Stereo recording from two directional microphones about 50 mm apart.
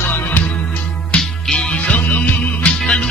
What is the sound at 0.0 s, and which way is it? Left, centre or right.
Music, left.